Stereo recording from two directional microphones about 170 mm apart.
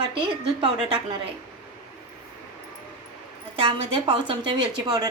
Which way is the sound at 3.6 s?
35° right (ahead or behind).